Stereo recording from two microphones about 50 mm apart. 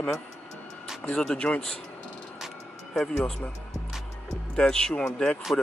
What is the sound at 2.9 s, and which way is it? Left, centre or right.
Speech, centre.